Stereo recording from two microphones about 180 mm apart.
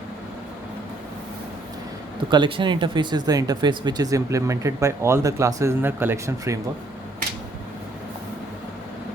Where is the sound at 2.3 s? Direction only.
25° right (ahead or behind).